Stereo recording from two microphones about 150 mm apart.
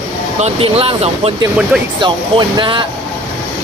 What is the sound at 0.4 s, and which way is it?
Speech, 40° right (ahead or behind).